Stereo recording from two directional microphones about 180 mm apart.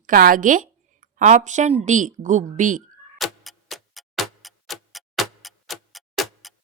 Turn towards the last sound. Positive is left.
turn(degrees=0)  # may be behind; listen again after turning